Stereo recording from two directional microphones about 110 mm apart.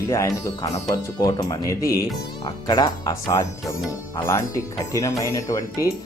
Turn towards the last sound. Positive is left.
turn(degrees=30)  # may be behind; listen again after turning